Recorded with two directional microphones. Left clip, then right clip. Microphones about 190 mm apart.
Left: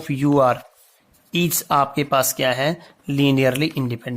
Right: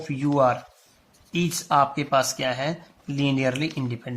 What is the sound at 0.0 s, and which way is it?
Speech, 55° left (ahead or behind).